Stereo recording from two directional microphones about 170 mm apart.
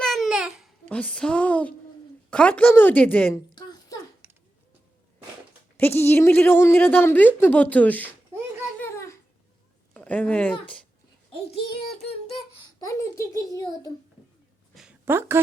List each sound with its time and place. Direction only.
0.0 s babbling: centre (ahead or behind)
0.9 s a woman's voice: 5° left (ahead or behind)
3.5 s a sound: 25° left (ahead or behind)
5.7 s a woman's voice: 15° left (ahead or behind)
8.8 s a sound: 15° left (ahead or behind)
9.9 s speech: 10° left (ahead or behind)
12.8 s a child's voice: 20° left (ahead or behind)
15.0 s a woman's voice: 15° right (ahead or behind)